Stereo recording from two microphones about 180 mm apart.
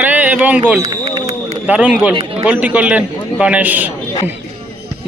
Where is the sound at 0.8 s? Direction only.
20° right (ahead or behind).